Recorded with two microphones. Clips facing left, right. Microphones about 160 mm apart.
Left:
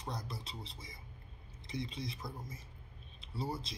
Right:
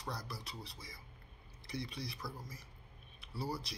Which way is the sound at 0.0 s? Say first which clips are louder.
Left 1 dB; 20° left (ahead or behind).